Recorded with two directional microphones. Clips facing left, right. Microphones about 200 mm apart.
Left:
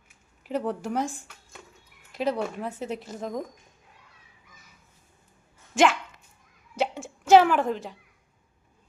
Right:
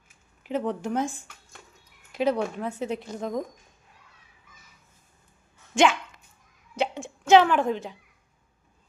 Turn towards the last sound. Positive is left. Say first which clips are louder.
# even
turn(degrees=0)  # may be behind; listen again after turning